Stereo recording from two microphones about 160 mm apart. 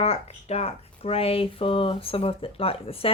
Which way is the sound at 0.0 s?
40° left (ahead or behind).